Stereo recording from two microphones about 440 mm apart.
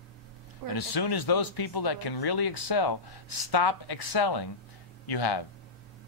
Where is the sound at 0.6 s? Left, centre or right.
Left.